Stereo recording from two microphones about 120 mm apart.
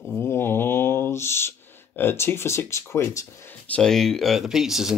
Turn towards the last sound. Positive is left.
turn(degrees=-5)  # may be behind; listen again after turning